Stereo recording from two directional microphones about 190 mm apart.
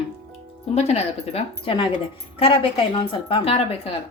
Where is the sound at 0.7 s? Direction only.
35° left (ahead or behind).